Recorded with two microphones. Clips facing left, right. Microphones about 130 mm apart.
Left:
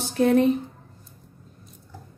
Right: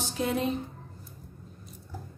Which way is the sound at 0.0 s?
60° left (ahead or behind).